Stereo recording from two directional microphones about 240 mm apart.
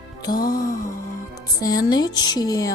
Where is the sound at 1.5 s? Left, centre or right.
Centre.